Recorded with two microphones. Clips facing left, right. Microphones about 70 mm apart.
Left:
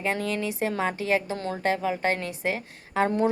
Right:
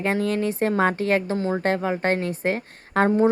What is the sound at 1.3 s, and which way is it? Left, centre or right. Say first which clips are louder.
Speech: right 7 dB; centre.